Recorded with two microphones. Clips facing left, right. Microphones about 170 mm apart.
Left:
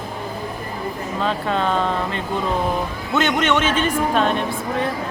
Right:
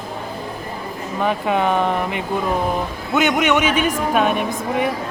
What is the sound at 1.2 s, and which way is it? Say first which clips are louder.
Speech: right 3 dB; 15° right (ahead or behind).